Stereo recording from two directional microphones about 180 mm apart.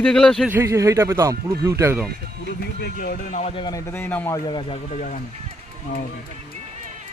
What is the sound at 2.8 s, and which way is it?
Speech, 55° left (ahead or behind).